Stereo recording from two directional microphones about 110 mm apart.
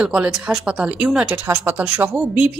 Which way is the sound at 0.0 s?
10° right (ahead or behind).